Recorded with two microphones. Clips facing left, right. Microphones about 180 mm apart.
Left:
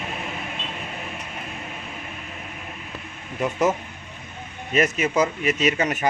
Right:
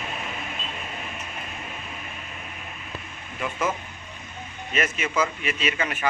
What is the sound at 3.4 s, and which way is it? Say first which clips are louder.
Speech: left 6 dB; 40° left (ahead or behind).